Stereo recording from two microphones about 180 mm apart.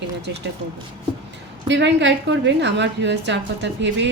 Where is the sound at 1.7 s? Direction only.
80° right.